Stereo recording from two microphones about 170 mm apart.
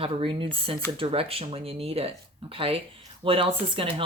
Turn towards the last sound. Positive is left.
turn(degrees=-30)  # may be behind; listen again after turning